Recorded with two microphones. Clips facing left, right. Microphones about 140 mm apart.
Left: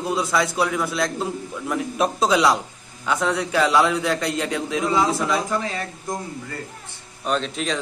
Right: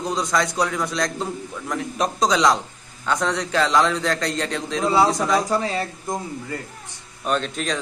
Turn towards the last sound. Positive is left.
turn(degrees=0)  # may be behind; listen again after turning